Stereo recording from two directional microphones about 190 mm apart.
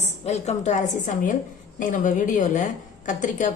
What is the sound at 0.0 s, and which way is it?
A woman's voice, 35° left (ahead or behind).